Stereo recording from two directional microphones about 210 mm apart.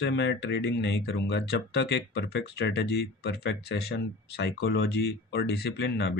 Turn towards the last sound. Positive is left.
turn(degrees=50)  # may be behind; listen again after turning